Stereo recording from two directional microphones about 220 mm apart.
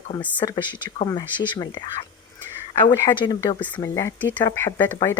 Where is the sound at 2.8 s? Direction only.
20° left (ahead or behind).